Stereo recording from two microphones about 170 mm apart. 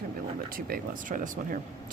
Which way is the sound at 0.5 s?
55° right (ahead or behind).